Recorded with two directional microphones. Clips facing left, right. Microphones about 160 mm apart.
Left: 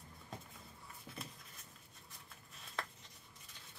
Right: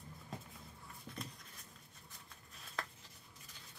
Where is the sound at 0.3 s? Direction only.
Centre (ahead or behind).